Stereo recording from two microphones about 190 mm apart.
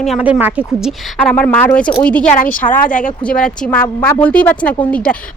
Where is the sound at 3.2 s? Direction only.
5° left (ahead or behind).